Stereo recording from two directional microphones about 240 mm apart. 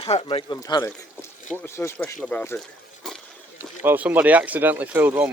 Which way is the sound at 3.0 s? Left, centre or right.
Centre.